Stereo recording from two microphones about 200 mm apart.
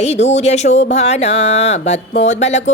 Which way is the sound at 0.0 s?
35° left (ahead or behind).